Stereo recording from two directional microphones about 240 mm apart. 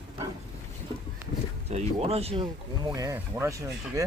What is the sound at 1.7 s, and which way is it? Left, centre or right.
Speech, right.